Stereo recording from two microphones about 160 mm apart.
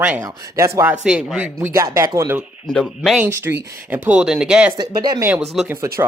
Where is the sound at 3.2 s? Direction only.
15° right (ahead or behind).